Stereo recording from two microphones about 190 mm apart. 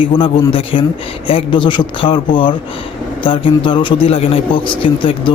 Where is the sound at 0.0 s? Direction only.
25° left (ahead or behind).